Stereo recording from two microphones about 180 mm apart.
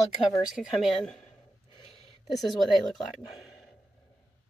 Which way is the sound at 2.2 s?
Centre (ahead or behind).